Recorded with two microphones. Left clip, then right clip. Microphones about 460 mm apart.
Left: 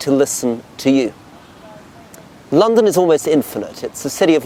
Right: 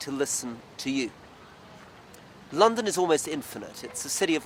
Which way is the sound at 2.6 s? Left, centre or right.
Left.